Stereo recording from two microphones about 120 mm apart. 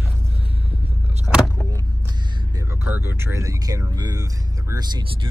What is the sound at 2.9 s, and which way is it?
Speech, 15° right (ahead or behind).